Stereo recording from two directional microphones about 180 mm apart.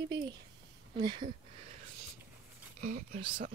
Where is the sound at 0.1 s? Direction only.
25° right (ahead or behind).